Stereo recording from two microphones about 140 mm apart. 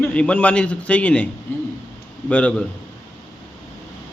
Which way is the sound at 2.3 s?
10° left (ahead or behind).